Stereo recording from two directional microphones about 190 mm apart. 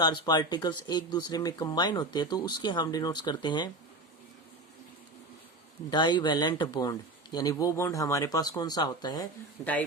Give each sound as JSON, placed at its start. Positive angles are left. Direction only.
{"t": 0.0, "sound": "speech", "side_deg": 20}
{"t": 5.9, "sound": "a man's voice", "side_deg": 25}